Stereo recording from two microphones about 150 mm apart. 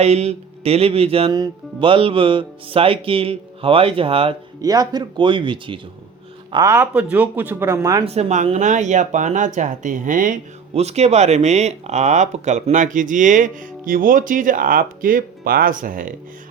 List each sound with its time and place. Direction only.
0.0 s speech: 45° right (ahead or behind)
4.6 s speech: 25° right (ahead or behind)
6.7 s speech: 10° right (ahead or behind)
8.0 s speech: 45° right (ahead or behind); by 16.1 s 65° right (ahead or behind)